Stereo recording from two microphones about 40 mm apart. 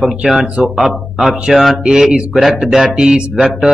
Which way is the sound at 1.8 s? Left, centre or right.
Centre.